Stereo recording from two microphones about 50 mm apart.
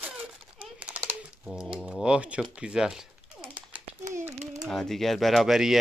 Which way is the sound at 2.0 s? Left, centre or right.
Right.